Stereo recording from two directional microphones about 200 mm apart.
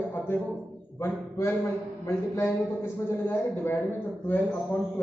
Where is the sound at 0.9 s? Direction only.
15° left (ahead or behind).